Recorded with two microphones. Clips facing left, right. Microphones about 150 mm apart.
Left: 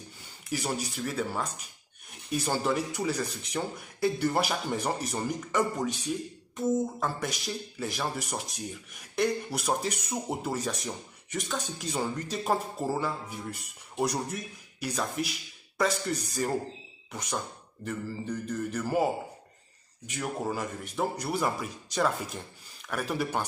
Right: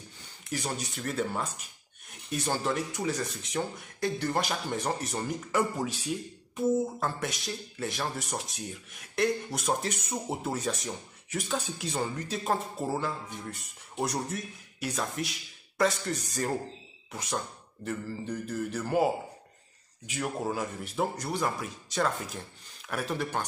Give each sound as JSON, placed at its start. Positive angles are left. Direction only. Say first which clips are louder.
{"t": 0.5, "sound": "speech", "louder": "left 2 dB", "side_deg": 5}
{"t": 20.1, "sound": "speech", "louder": "even", "side_deg": -5}